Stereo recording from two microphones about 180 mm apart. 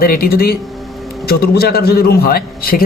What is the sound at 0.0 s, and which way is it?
Speech, 55° left (ahead or behind).